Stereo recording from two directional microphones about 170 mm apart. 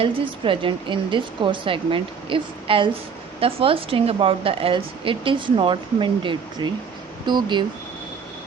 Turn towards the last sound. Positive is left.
turn(degrees=-25)  # may be behind; listen again after turning